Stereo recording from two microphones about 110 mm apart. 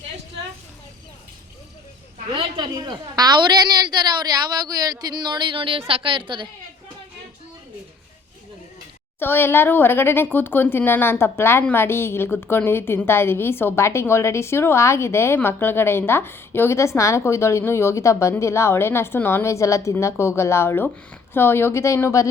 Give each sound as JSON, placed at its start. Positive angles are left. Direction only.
{"t": 2.3, "sound": "a woman's voice", "side_deg": -45}
{"t": 9.1, "sound": "a woman's voice", "side_deg": 20}